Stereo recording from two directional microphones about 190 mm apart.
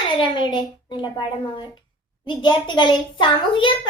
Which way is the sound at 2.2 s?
25° left (ahead or behind).